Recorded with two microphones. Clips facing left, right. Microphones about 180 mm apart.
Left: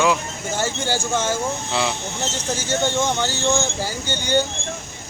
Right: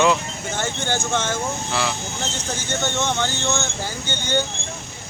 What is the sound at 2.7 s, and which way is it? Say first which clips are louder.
Speech: left 3 dB; 15° left (ahead or behind).